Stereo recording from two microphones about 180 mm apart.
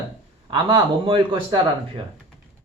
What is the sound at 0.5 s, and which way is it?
A man's voice, 30° right (ahead or behind).